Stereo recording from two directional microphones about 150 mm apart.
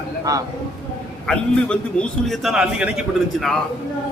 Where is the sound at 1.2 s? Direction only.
5° left (ahead or behind).